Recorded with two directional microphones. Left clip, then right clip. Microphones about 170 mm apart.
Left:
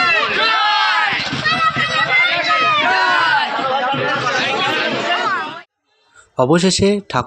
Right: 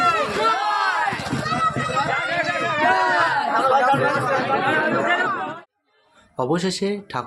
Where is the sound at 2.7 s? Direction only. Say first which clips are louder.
Left 4 dB; 20° right (ahead or behind).